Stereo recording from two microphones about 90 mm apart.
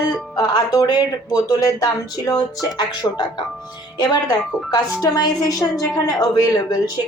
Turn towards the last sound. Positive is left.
turn(degrees=45)  # may be behind; listen again after turning